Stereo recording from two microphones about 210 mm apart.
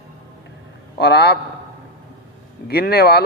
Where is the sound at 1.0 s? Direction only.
50° left (ahead or behind).